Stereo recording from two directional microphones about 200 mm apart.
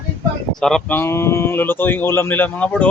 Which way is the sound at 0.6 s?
5° left (ahead or behind).